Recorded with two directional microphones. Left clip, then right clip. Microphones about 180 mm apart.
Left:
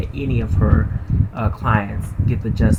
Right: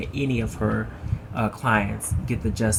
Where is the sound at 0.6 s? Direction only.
10° right (ahead or behind).